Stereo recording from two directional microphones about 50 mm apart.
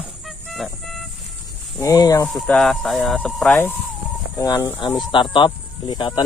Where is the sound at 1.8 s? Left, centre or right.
Left.